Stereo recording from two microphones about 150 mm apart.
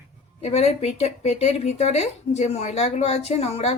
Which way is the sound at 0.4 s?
45° left (ahead or behind).